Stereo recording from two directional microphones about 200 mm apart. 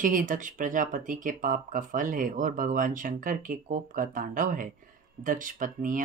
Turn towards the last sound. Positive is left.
turn(degrees=-40)  # may be behind; listen again after turning